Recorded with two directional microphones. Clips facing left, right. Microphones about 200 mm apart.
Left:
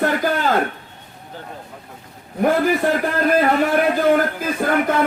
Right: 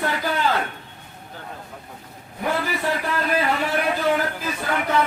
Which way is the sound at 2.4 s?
50° left (ahead or behind).